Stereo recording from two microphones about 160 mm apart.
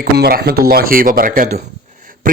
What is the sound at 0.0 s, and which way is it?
Speech, 70° right (ahead or behind).